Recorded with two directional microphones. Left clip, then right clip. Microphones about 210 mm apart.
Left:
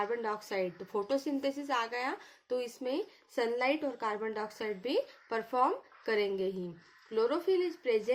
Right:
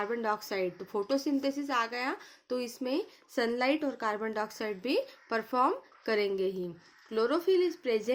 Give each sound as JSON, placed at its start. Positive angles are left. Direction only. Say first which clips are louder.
{"t": 0.0, "sound": "a woman's voice", "louder": "right 2 dB", "side_deg": -20}